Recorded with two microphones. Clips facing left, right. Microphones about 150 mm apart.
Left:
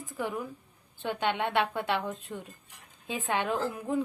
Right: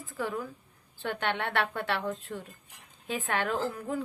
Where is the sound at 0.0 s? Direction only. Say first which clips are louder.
Even; 15° left (ahead or behind).